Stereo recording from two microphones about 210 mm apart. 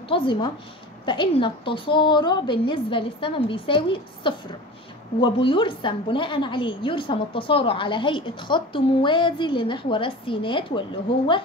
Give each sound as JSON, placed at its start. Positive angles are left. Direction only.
{"t": 0.1, "sound": "a woman's voice", "side_deg": 25}